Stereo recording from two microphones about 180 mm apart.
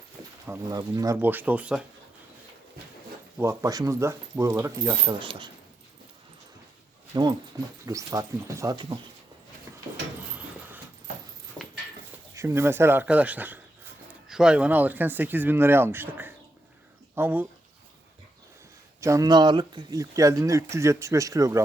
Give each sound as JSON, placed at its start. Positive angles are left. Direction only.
{"t": 0.4, "sound": "speech", "side_deg": -15}
{"t": 3.3, "sound": "speech", "side_deg": -15}
{"t": 7.1, "sound": "speech", "side_deg": -25}
{"t": 12.3, "sound": "speech", "side_deg": -15}
{"t": 18.9, "sound": "speech", "side_deg": -15}